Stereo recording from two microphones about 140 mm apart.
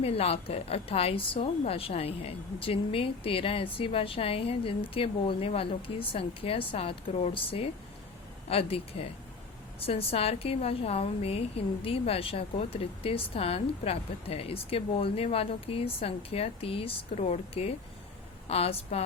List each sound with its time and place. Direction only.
0.0 s a woman's voice: 45° left (ahead or behind)